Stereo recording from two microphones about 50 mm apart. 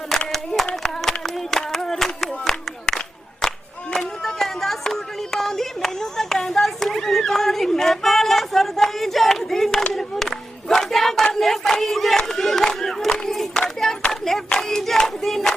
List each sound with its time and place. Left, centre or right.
0.3 s speech: centre
0.8 s clapping: centre
3.9 s a sound: centre
9.9 s battle cry: centre
13.5 s hands: centre